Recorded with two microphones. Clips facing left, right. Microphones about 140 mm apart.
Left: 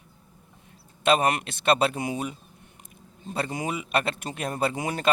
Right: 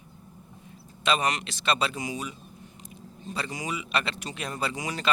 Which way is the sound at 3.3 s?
55° left (ahead or behind).